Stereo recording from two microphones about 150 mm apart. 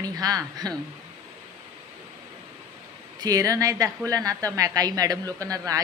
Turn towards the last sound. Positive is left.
turn(degrees=-25)  # may be behind; listen again after turning